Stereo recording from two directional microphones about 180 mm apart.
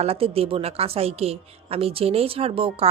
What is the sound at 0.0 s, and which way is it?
Speech, 35° right (ahead or behind).